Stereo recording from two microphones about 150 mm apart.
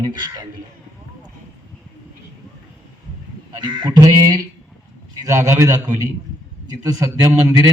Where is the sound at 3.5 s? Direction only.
30° right (ahead or behind).